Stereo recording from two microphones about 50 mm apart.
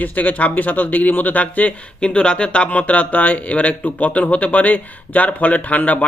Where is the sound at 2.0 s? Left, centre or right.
Centre.